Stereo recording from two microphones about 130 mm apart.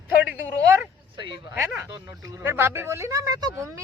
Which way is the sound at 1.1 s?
40° right (ahead or behind).